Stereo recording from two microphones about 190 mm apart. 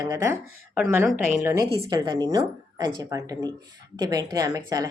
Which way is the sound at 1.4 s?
15° right (ahead or behind).